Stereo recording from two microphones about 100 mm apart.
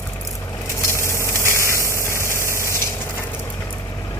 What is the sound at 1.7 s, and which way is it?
Engine, 30° left (ahead or behind).